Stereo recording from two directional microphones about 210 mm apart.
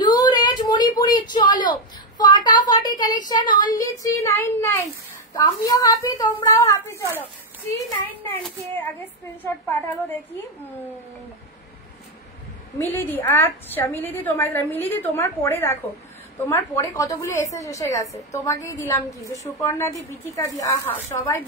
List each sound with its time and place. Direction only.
0.0 s a sound: 20° left (ahead or behind)
1.3 s a woman's voice: 20° left (ahead or behind)
12.7 s a woman's voice: 10° left (ahead or behind)